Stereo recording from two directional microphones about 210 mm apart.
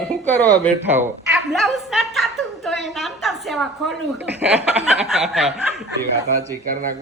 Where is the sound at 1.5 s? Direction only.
Centre (ahead or behind).